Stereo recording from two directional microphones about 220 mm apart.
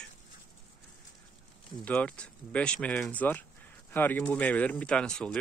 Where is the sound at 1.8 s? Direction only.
5° left (ahead or behind).